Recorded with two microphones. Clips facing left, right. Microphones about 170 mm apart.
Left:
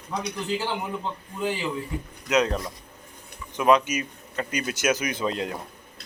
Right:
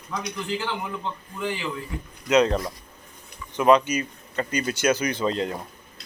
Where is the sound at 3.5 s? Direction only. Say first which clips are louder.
Right 2 dB; 5° left (ahead or behind).